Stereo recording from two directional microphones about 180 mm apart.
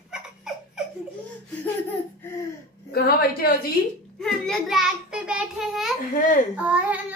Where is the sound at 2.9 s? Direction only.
60° left (ahead or behind).